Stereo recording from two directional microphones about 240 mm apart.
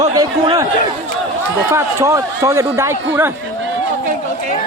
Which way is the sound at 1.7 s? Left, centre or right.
Centre.